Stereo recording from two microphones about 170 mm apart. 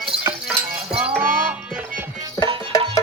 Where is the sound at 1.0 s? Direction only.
5° right (ahead or behind).